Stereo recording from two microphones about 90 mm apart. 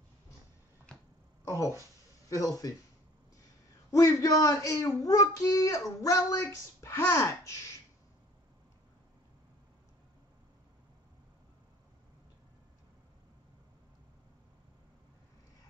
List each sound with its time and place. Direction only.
1.4 s speech: 35° left (ahead or behind)
3.9 s speech: 40° left (ahead or behind)